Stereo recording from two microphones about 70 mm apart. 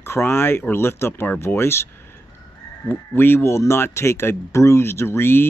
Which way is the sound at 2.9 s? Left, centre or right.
Left.